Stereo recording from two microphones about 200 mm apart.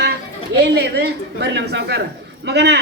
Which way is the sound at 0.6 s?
55° right (ahead or behind).